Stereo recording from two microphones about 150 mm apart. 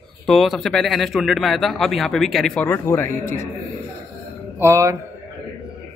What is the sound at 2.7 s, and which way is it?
Speech, 15° left (ahead or behind).